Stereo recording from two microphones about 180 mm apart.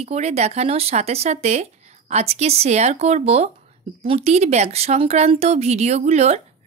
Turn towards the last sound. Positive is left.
turn(degrees=-35)  # may be behind; listen again after turning